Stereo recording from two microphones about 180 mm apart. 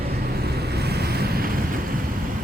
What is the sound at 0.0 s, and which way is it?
Vehicle, 60° right (ahead or behind).